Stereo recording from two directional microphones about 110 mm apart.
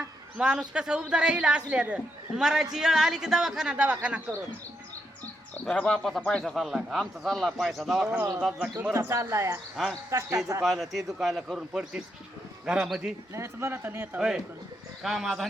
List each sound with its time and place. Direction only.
0.3 s a man's voice: 10° right (ahead or behind)
5.7 s a man's voice: 10° left (ahead or behind)
8.1 s a man's voice: 20° right (ahead or behind)
9.7 s a man's voice: centre (ahead or behind)
10.1 s a man's voice: 30° right (ahead or behind)
10.6 s a man's voice: centre (ahead or behind)
13.3 s a man's voice: 25° right (ahead or behind); by 15.4 s centre (ahead or behind)